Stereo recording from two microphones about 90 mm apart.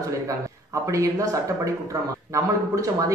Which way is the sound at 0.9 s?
40° right (ahead or behind).